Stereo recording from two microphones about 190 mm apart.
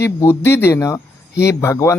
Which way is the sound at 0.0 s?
15° left (ahead or behind).